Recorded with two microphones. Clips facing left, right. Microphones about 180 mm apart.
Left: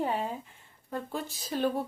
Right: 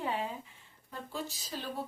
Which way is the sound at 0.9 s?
55° left (ahead or behind).